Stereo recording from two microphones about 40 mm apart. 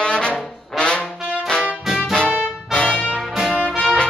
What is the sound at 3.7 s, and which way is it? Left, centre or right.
Music, centre.